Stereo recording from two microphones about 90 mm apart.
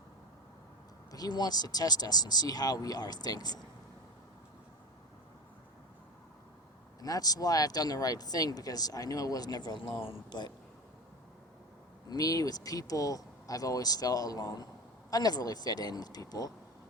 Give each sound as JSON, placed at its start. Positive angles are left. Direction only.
{"t": 1.1, "sound": "speech", "side_deg": 50}
{"t": 7.0, "sound": "speech", "side_deg": 45}
{"t": 12.0, "sound": "speech", "side_deg": 45}